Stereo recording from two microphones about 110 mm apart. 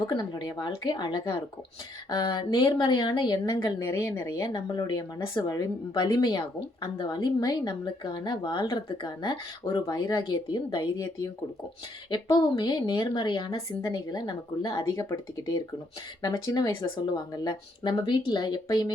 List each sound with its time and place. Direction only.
0.1 s a woman's voice: 45° left (ahead or behind)
4.0 s a woman's voice: 25° left (ahead or behind)
4.4 s a woman's voice: 40° left (ahead or behind)
12.1 s a woman's voice: 40° left (ahead or behind)
16.2 s a woman's voice: 35° left (ahead or behind)